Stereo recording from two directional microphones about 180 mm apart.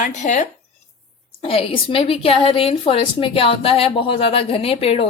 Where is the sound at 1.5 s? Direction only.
30° left (ahead or behind).